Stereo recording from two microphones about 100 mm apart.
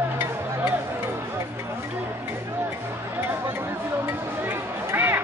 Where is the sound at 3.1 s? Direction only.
25° right (ahead or behind).